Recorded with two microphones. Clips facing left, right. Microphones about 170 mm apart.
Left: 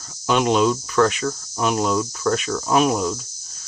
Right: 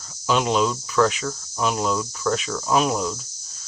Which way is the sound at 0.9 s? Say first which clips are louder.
Left 2 dB; 55° left (ahead or behind).